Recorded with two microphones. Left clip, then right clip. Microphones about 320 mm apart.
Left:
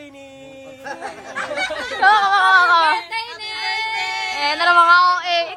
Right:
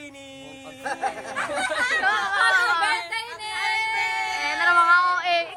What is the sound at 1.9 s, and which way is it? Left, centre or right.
Speech, centre.